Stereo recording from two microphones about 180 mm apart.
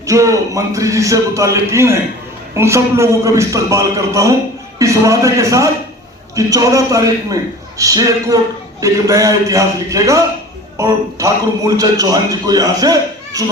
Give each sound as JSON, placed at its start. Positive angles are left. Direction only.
{"t": 0.0, "sound": "a man's voice", "side_deg": -15}